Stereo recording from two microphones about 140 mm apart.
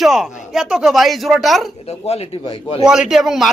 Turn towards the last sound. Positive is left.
turn(degrees=0)  # may be behind; listen again after turning